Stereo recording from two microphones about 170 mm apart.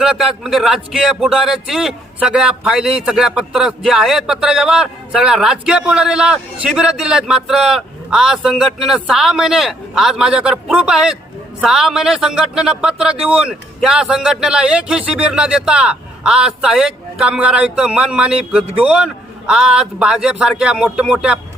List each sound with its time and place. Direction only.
0.0 s speech: 5° right (ahead or behind)